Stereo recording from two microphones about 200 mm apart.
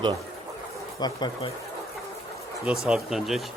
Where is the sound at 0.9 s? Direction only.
20° left (ahead or behind).